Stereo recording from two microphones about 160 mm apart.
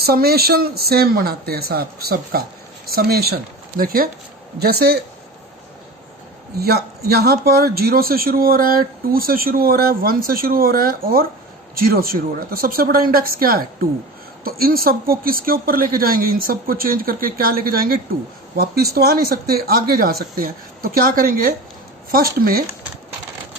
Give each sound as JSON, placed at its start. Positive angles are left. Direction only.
{"t": 0.0, "sound": "speech", "side_deg": -75}
{"t": 4.6, "sound": "speech", "side_deg": -75}
{"t": 6.6, "sound": "speech", "side_deg": -80}